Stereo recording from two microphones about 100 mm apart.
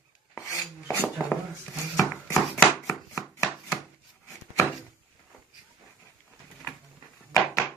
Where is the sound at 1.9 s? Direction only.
30° left (ahead or behind).